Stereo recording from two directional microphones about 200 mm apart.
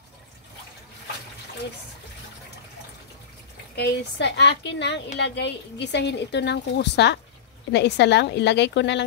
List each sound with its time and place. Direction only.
3.7 s a woman's voice: 60° left (ahead or behind)